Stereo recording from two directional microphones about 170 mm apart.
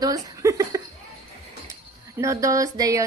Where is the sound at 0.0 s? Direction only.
20° right (ahead or behind).